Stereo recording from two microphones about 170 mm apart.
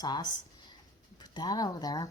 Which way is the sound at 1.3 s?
25° left (ahead or behind).